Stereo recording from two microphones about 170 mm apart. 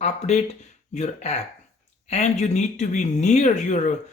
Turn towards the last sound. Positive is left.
turn(degrees=45)  # may be behind; listen again after turning